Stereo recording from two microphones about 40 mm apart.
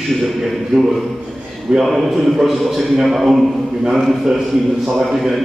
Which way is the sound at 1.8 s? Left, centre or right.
Centre.